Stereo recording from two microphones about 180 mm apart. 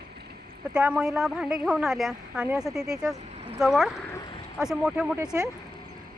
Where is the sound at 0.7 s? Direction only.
5° right (ahead or behind).